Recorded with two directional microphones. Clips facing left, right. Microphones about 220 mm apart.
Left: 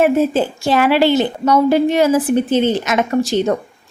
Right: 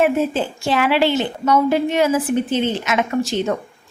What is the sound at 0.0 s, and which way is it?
A woman's voice, 40° left (ahead or behind).